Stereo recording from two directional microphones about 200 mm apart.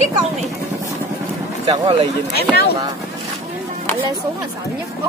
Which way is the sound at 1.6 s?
25° right (ahead or behind).